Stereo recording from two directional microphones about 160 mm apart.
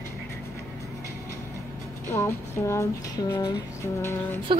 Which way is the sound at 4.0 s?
15° left (ahead or behind).